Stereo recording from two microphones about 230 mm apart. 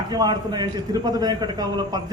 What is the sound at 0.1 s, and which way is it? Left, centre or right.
A man's voice, centre.